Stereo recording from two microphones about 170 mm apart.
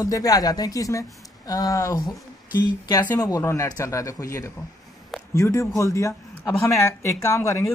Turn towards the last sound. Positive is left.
turn(degrees=15)  # may be behind; listen again after turning